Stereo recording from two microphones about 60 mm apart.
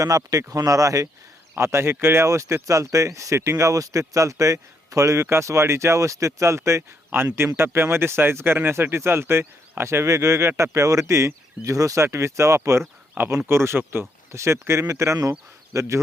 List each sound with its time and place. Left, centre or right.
0.3 s speech: right
1.5 s speech: right
11.6 s speech: right
12.0 s speech: right